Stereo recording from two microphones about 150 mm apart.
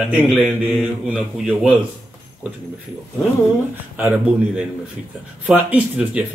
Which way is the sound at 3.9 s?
10° right (ahead or behind).